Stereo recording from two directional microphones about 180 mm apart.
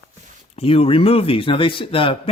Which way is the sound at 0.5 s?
35° left (ahead or behind).